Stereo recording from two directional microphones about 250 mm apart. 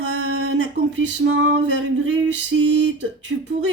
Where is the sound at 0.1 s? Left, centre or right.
Right.